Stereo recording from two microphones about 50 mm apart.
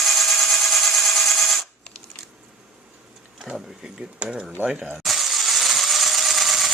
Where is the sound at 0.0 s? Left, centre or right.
Centre.